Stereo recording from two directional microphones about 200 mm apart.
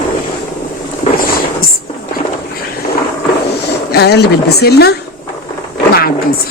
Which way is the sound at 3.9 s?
55° left (ahead or behind).